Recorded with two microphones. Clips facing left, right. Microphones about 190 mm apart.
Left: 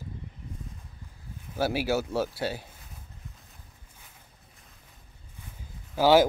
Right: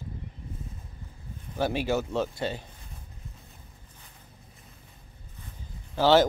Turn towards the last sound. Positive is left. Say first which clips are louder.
# left 1 dB
turn(degrees=10)  # may be behind; listen again after turning